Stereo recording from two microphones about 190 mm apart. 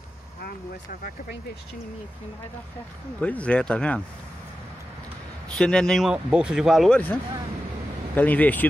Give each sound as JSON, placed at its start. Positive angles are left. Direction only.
{"t": 0.4, "sound": "speech", "side_deg": 50}
{"t": 3.2, "sound": "speech", "side_deg": 5}
{"t": 5.6, "sound": "speech", "side_deg": 5}
{"t": 8.2, "sound": "speech", "side_deg": 10}